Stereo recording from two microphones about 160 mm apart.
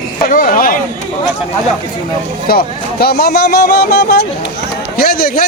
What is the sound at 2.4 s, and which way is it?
Speech, 70° left (ahead or behind).